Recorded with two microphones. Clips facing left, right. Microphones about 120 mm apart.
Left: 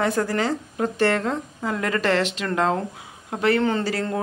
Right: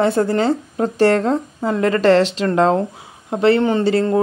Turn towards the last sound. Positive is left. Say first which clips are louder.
# right 7 dB
turn(degrees=-25)  # may be behind; listen again after turning